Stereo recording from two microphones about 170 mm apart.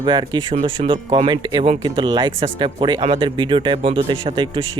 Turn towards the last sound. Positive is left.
turn(degrees=-30)  # may be behind; listen again after turning